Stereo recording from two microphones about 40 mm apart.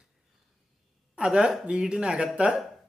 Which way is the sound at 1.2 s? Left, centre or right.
Right.